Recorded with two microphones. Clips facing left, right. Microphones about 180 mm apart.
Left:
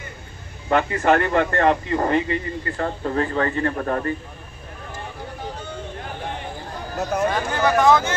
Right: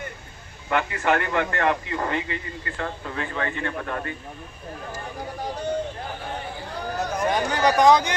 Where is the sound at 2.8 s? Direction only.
40° left (ahead or behind).